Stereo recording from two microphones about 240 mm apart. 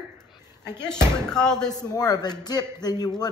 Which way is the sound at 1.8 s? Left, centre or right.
Centre.